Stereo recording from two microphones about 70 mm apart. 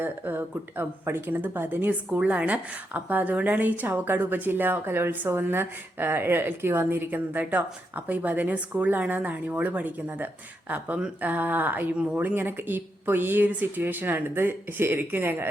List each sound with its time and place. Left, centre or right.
0.0 s a woman's voice: right